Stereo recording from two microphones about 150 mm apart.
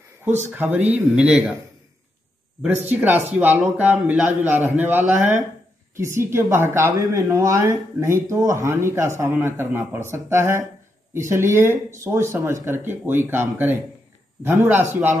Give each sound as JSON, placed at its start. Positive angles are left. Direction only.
{"t": 0.5, "sound": "speech", "side_deg": -10}
{"t": 2.9, "sound": "speech", "side_deg": -10}